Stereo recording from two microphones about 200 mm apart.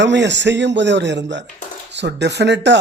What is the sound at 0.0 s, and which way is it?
Speech, 60° right (ahead or behind).